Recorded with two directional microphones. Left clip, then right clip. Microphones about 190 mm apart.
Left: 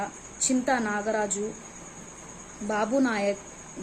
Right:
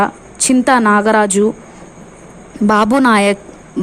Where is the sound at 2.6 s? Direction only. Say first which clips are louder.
Right 15 dB; 55° right (ahead or behind).